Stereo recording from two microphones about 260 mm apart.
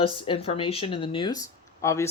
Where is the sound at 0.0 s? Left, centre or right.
Left.